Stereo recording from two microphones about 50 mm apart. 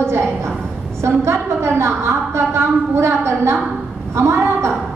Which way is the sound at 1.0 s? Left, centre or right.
Right.